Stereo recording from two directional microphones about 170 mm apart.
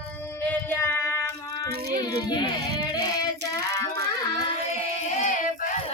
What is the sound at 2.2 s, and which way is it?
Speech, 25° left (ahead or behind).